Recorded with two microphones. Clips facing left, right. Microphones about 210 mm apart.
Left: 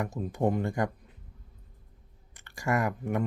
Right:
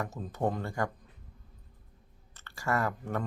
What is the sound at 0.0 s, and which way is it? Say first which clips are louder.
Speech: left 4 dB; 15° left (ahead or behind).